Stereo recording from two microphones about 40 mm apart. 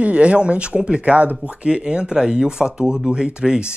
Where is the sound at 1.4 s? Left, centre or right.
Right.